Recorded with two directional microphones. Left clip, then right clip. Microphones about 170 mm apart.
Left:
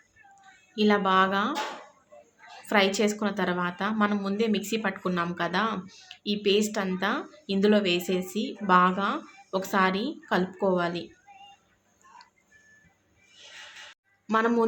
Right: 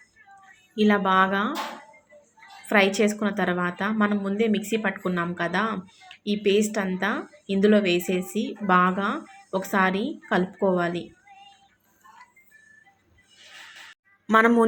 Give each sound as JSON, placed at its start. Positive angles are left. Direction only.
{"t": 0.8, "sound": "a woman's voice", "side_deg": -15}
{"t": 2.6, "sound": "a woman's voice", "side_deg": -15}
{"t": 14.3, "sound": "a woman's voice", "side_deg": -15}